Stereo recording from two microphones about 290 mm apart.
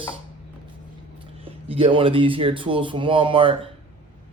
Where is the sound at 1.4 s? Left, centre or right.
Centre.